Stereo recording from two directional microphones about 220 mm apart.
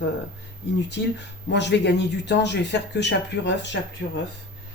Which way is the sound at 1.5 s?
50° left (ahead or behind).